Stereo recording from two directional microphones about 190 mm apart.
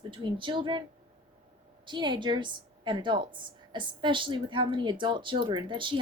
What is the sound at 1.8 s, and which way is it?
Speech, 25° right (ahead or behind).